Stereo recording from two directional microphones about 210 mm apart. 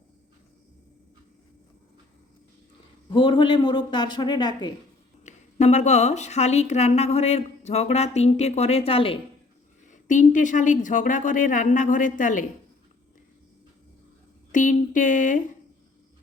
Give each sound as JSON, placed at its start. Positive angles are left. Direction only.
{"t": 3.1, "sound": "speech", "side_deg": 25}
{"t": 5.2, "sound": "a woman's voice", "side_deg": 35}
{"t": 9.9, "sound": "a woman's voice", "side_deg": 35}
{"t": 14.5, "sound": "a woman's voice", "side_deg": 40}